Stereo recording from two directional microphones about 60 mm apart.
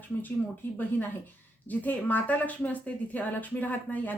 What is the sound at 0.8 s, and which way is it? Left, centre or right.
Speech, left.